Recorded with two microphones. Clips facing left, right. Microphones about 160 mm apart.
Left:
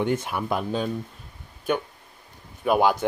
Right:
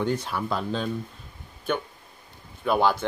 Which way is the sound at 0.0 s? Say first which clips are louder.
Left 2 dB; 20° left (ahead or behind).